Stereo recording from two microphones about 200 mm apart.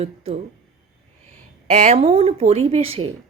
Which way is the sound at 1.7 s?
35° right (ahead or behind).